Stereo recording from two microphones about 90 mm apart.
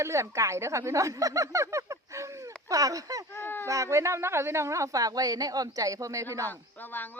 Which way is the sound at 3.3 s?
25° left (ahead or behind).